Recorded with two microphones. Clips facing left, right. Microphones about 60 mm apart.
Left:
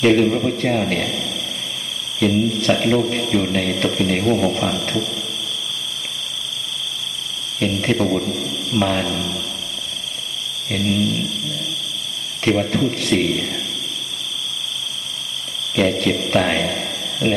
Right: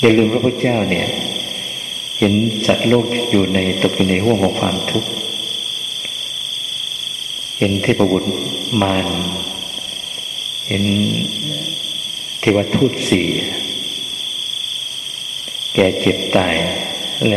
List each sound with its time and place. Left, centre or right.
0.0 s speech: right
7.8 s speech: right
8.7 s mantra: right
10.7 s mantra: right
12.4 s speech: right
15.7 s speech: right